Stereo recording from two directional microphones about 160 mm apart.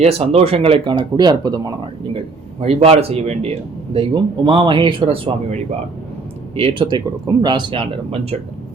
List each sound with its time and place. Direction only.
0.0 s speech: 40° right (ahead or behind)
6.6 s speech: 30° right (ahead or behind)